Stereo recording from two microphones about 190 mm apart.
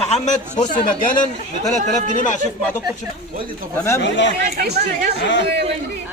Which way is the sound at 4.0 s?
65° left (ahead or behind).